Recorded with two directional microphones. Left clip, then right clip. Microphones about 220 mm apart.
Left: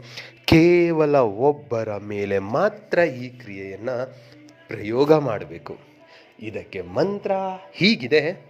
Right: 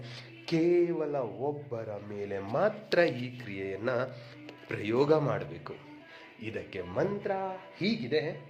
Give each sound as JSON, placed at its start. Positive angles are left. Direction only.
{"t": 0.2, "sound": "a man's voice", "side_deg": 35}
{"t": 3.4, "sound": "a sound", "side_deg": 15}
{"t": 4.7, "sound": "speech", "side_deg": 20}
{"t": 7.8, "sound": "speech", "side_deg": 40}